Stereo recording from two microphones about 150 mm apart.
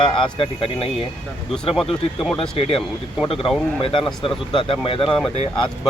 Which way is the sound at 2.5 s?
40° left (ahead or behind).